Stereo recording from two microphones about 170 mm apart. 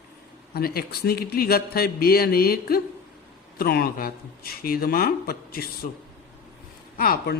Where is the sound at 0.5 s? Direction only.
65° left (ahead or behind).